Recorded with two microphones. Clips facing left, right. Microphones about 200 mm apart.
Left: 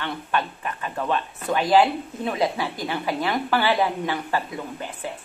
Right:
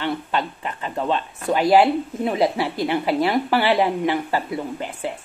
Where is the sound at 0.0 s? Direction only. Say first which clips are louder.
Right 3 dB; 20° right (ahead or behind).